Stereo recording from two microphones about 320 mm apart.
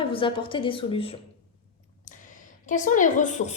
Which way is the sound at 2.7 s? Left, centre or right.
Left.